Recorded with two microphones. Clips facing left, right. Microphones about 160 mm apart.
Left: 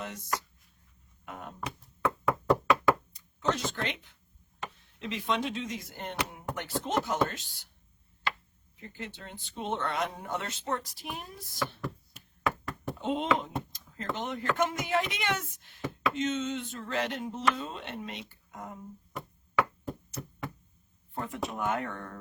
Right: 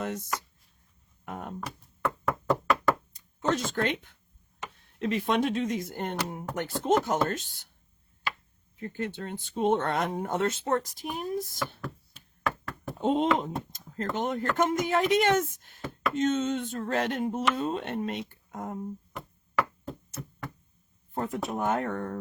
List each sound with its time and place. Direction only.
0.0 s speech: 50° right (ahead or behind)
1.2 s a sound: 50° right (ahead or behind)
2.2 s knock: centre (ahead or behind)
3.2 s a sound: 50° right (ahead or behind)
4.9 s speech: 55° right (ahead or behind)
8.8 s speech: 50° right (ahead or behind)
11.8 s knock: centre (ahead or behind)
13.0 s speech: 45° right (ahead or behind)
19.1 s chop: centre (ahead or behind)
21.1 s speech: 40° right (ahead or behind)